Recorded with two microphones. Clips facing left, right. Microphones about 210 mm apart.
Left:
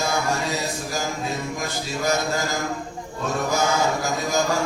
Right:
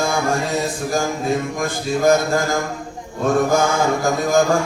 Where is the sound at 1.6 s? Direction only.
50° right (ahead or behind).